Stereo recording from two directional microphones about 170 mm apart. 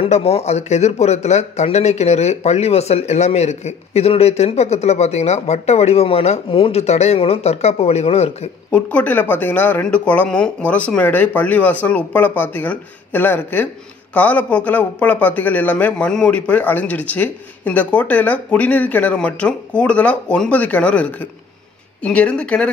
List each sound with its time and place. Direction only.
0.0 s speech: 35° left (ahead or behind)
8.7 s speech: 10° left (ahead or behind)